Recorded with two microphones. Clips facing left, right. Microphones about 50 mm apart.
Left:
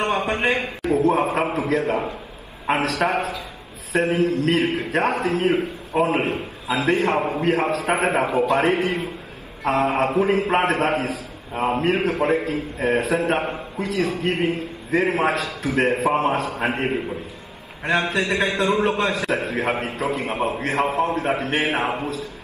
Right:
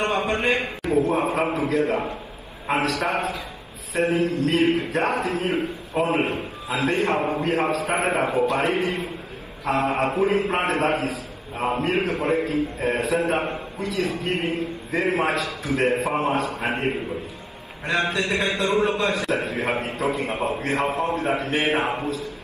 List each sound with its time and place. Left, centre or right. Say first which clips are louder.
0.3 s a man's voice: left 1 dB; left
0.9 s a man's voice: left 2 dB; left
7.2 s a man's voice: left 1 dB; left
7.4 s a man's voice: left 2 dB; left